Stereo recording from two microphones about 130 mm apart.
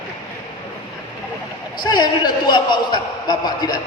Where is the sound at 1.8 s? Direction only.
35° left (ahead or behind).